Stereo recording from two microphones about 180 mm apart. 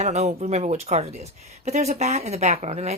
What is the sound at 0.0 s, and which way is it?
Speech, 40° right (ahead or behind).